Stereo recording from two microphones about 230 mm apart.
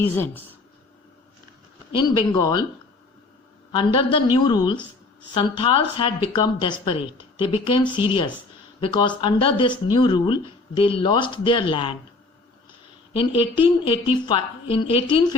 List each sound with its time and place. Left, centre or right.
1.9 s speech: centre
3.7 s speech: left
13.1 s speech: left